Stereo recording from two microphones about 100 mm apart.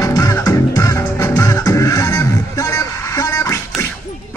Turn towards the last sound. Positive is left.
turn(degrees=30)  # may be behind; listen again after turning